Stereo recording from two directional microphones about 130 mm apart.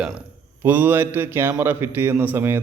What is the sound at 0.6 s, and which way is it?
Speech, 15° right (ahead or behind).